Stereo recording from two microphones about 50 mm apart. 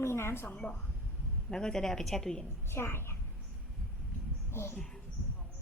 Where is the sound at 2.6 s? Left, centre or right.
Left.